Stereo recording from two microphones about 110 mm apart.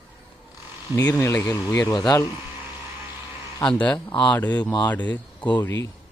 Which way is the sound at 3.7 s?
10° left (ahead or behind).